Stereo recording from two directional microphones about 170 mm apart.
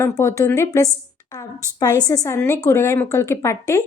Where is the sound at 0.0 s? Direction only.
15° left (ahead or behind).